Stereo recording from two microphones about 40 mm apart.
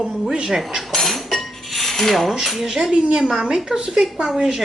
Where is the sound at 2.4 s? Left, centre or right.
Centre.